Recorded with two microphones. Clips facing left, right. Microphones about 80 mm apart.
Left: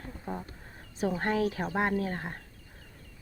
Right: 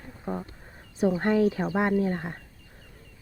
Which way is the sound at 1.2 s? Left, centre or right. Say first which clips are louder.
Right 5 dB; centre.